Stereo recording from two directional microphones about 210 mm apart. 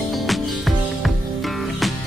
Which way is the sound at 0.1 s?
Centre (ahead or behind).